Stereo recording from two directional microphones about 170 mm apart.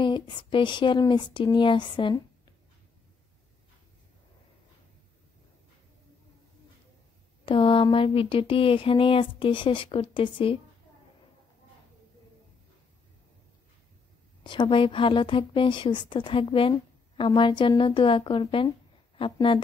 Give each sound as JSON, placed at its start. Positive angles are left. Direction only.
{"t": 0.0, "sound": "speech", "side_deg": 30}
{"t": 7.4, "sound": "speech", "side_deg": 30}
{"t": 14.4, "sound": "speech", "side_deg": 30}